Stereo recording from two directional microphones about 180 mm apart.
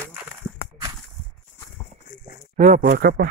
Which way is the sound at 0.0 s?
15° right (ahead or behind).